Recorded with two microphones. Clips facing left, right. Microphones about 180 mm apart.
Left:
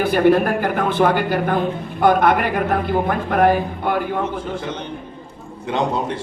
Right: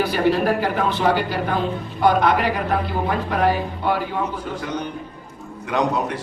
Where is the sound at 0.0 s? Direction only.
50° left (ahead or behind).